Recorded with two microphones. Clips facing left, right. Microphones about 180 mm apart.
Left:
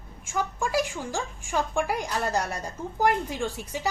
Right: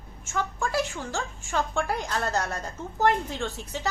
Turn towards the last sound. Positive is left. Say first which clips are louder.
# left 2 dB
turn(degrees=10)  # may be behind; listen again after turning